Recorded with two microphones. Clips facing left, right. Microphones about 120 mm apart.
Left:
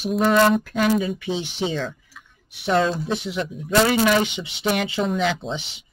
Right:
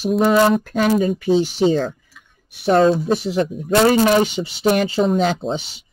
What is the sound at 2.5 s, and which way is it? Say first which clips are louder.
Speech: right 6 dB; 40° right (ahead or behind).